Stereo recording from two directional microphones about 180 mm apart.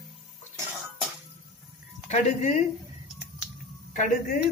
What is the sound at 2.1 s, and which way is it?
Speech, 40° left (ahead or behind).